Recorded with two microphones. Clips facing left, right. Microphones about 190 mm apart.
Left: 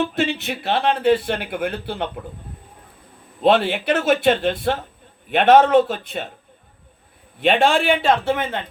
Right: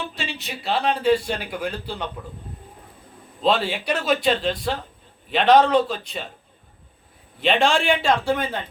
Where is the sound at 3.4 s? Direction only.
55° left (ahead or behind).